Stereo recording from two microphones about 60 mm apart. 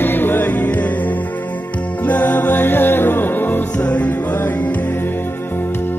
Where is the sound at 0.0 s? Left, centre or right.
Left.